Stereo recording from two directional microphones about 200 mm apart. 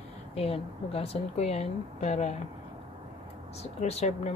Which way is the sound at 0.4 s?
30° left (ahead or behind).